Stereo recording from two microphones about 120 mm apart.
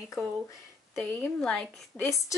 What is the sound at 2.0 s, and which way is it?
Speech, 25° left (ahead or behind).